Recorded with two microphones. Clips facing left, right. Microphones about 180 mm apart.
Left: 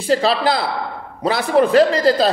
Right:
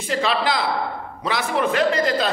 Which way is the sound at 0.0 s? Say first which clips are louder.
Left 5 dB; 35° left (ahead or behind).